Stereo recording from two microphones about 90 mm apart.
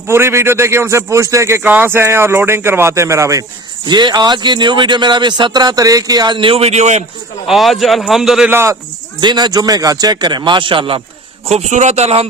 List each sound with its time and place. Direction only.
0.1 s a man's voice: 30° right (ahead or behind)
3.8 s speech: 60° right (ahead or behind)
6.3 s a man's voice: 80° right
7.4 s a man's voice: centre (ahead or behind)
8.4 s speech: 25° right (ahead or behind)
9.2 s a man's voice: 50° right (ahead or behind); by 11.0 s 70° right (ahead or behind)